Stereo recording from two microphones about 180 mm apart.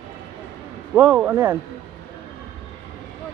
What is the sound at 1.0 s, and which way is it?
Speech, 5° right (ahead or behind).